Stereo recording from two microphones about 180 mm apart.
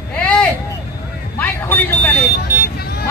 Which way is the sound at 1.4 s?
10° left (ahead or behind).